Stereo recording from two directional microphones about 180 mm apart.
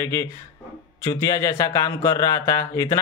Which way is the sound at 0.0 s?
15° left (ahead or behind).